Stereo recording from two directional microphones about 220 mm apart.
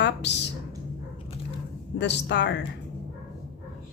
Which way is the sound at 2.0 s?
50° left (ahead or behind).